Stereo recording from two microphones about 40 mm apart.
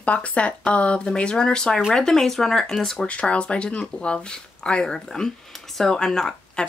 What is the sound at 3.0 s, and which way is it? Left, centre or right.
Speech, left.